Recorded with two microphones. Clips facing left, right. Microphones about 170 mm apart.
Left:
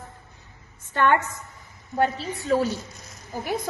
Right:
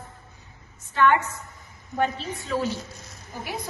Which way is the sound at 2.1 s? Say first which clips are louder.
Left 5 dB; 40° left (ahead or behind).